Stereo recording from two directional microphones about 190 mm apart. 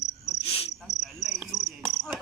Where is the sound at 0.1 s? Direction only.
35° left (ahead or behind).